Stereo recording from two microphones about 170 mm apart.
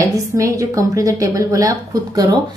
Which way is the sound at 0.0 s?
20° right (ahead or behind).